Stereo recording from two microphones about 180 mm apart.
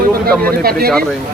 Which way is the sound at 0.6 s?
60° right (ahead or behind).